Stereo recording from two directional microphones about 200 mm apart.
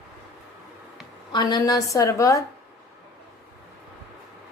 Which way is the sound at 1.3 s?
20° left (ahead or behind).